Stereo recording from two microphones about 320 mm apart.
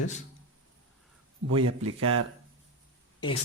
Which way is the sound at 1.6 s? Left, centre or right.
Right.